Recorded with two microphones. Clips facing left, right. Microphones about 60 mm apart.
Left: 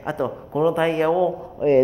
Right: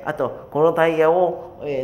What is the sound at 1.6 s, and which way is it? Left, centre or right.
Speech, left.